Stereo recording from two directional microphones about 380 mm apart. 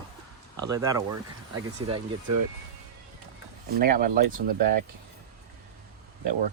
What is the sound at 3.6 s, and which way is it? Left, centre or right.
Speech, right.